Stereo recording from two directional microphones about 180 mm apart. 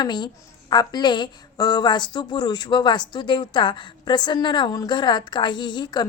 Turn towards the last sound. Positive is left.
turn(degrees=25)  # may be behind; listen again after turning